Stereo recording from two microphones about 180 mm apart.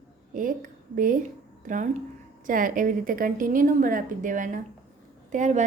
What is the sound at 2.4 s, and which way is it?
A woman's voice, 50° right (ahead or behind).